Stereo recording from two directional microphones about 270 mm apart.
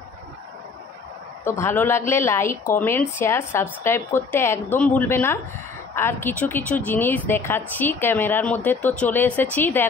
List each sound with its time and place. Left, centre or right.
1.4 s speech: centre